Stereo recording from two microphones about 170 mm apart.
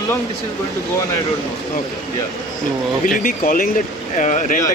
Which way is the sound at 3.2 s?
55° left (ahead or behind).